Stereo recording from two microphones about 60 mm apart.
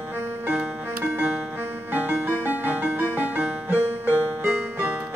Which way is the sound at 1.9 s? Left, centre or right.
Right.